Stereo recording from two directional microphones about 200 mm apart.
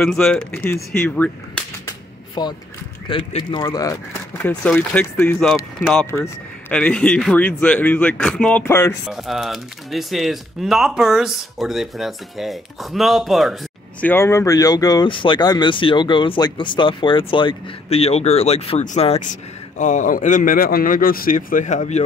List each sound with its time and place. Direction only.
0.0 s speech: centre (ahead or behind)
2.4 s a man's voice: 20° left (ahead or behind)
9.0 s speech: centre (ahead or behind)
14.0 s a man's voice: 10° left (ahead or behind); by 22.0 s 35° left (ahead or behind)